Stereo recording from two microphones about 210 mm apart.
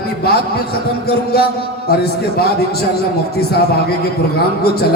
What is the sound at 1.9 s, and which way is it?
Speech, 50° left (ahead or behind).